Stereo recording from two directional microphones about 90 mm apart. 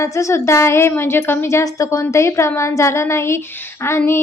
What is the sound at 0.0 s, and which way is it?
Speech, 35° left (ahead or behind).